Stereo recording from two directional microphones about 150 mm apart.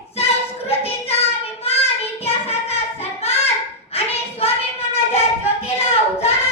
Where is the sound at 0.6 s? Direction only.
40° left (ahead or behind).